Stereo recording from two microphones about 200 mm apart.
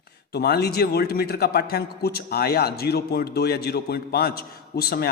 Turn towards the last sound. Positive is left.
turn(degrees=50)  # may be behind; listen again after turning